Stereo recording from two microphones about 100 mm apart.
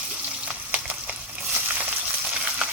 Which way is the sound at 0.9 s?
15° right (ahead or behind).